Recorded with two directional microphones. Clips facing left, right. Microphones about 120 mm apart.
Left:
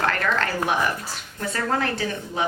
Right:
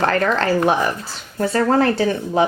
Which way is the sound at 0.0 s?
35° right (ahead or behind).